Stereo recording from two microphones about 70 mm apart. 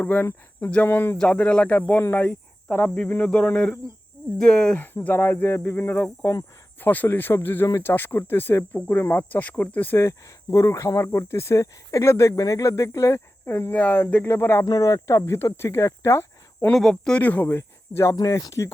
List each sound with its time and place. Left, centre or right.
0.0 s speech: left
1.2 s speech: centre
2.0 s speech: left
2.6 s speech: centre
4.8 s speech: left
5.7 s speech: left
10.5 s speech: left
14.6 s speech: left
15.2 s speech: left
16.9 s speech: centre
17.4 s speech: left
18.2 s speech: left